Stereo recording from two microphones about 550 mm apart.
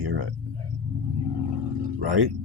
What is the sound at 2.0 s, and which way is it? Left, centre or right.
Speech, right.